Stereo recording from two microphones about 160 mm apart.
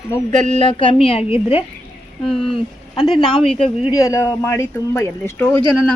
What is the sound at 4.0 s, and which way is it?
Speech, 20° left (ahead or behind).